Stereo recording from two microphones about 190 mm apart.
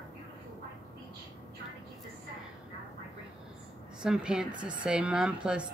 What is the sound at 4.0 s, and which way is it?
A woman's voice, 5° right (ahead or behind).